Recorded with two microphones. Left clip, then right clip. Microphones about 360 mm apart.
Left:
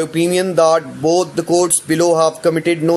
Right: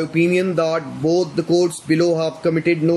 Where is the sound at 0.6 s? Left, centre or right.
Centre.